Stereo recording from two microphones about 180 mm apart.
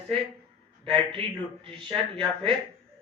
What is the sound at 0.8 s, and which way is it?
A man's voice, 30° right (ahead or behind).